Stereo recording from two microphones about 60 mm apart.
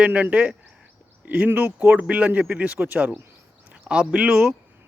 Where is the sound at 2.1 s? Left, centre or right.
Right.